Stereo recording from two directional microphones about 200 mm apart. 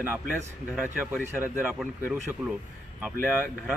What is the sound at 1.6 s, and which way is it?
Speech, 5° right (ahead or behind).